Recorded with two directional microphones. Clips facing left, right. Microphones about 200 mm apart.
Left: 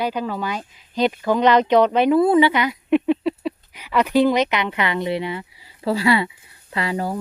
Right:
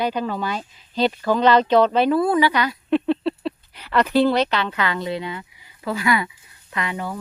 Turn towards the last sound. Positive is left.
turn(degrees=35)  # may be behind; listen again after turning